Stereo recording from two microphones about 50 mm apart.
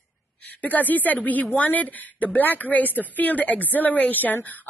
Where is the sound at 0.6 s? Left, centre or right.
Left.